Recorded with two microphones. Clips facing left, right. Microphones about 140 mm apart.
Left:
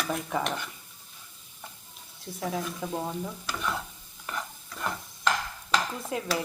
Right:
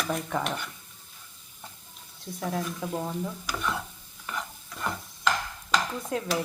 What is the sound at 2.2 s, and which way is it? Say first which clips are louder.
A woman's voice: right 1 dB; centre (ahead or behind).